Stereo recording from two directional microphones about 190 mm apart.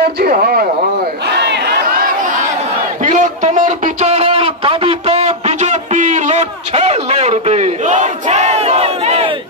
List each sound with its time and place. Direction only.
0.2 s speech: 55° right (ahead or behind)
1.4 s battle cry: 60° right (ahead or behind)
3.0 s a sound: 40° right (ahead or behind)